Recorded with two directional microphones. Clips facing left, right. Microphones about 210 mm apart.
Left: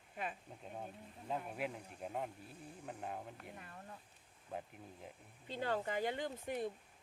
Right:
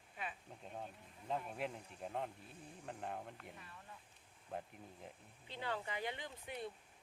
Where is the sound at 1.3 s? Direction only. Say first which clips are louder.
Left 1 dB; 5° left (ahead or behind).